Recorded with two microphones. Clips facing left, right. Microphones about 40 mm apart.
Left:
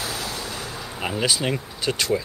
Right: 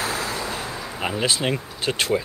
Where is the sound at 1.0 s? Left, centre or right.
Centre.